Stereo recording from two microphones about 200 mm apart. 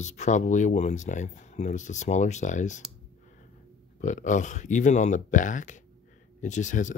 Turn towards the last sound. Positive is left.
turn(degrees=40)  # may be behind; listen again after turning